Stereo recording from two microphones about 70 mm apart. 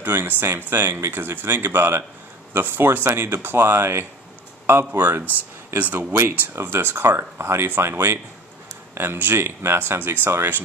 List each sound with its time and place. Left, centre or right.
0.0 s speech: right